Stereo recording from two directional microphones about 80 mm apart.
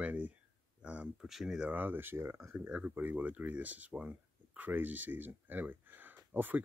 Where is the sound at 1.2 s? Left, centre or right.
Centre.